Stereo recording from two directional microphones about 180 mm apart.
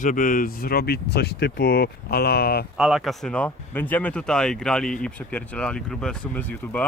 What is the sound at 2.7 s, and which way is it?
Speech, centre (ahead or behind).